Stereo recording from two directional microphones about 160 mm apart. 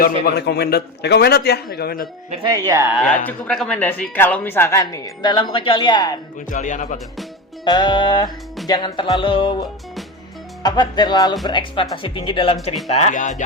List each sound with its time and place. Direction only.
0.3 s a man's voice: 85° left
2.4 s speech: 20° right (ahead or behind)
3.2 s speech: 5° left (ahead or behind); by 6.1 s 25° left (ahead or behind)
6.5 s speech: 50° left (ahead or behind)
7.6 s speech: 30° left (ahead or behind)
12.9 s speech: 45° left (ahead or behind)